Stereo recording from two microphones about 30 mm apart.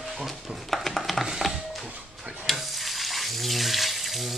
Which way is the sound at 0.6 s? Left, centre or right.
Centre.